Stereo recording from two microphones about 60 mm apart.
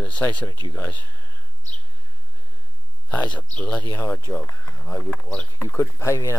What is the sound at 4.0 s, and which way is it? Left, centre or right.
Speech, left.